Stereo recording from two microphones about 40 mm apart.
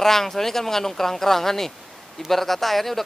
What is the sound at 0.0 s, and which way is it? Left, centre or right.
Speech, centre.